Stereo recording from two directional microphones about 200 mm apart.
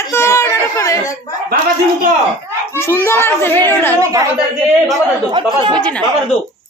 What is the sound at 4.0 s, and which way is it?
A woman's voice, 15° right (ahead or behind).